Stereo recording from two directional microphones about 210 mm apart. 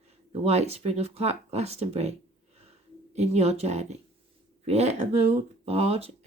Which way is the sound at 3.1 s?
30° right (ahead or behind).